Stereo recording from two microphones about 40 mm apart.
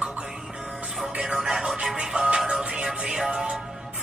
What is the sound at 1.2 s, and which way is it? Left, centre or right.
Music, centre.